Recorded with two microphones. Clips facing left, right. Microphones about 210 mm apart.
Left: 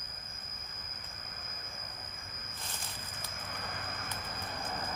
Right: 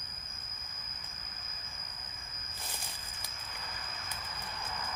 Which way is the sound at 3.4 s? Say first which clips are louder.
Left 5 dB; 55° left (ahead or behind).